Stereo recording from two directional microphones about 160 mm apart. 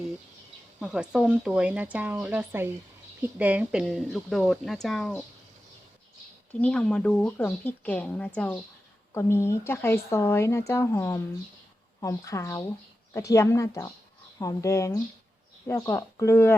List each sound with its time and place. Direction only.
0.8 s speech: 5° right (ahead or behind)
6.5 s a woman's voice: 10° left (ahead or behind)